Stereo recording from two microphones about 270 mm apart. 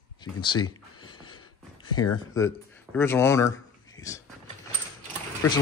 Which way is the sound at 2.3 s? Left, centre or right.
Centre.